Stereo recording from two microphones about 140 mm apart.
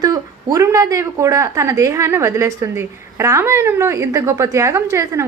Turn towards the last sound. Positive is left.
turn(degrees=-20)  # may be behind; listen again after turning